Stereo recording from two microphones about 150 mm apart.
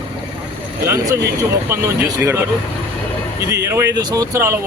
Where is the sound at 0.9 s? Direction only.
20° right (ahead or behind).